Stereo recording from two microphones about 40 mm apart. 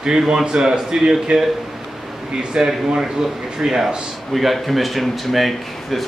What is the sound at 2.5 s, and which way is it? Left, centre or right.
A man's voice, centre.